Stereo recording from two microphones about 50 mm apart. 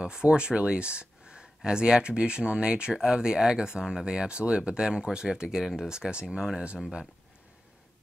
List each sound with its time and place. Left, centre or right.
0.0 s speech: centre
5.9 s speech: centre